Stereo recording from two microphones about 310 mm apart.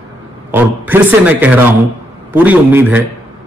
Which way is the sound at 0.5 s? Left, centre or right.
Centre.